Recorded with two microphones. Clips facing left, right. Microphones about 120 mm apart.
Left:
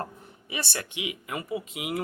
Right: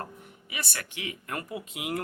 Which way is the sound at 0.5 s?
30° left (ahead or behind).